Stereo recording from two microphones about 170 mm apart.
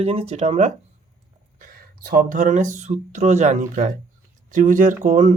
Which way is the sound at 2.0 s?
50° right (ahead or behind).